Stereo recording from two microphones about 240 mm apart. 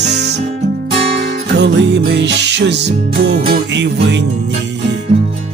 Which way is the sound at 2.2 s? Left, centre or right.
Right.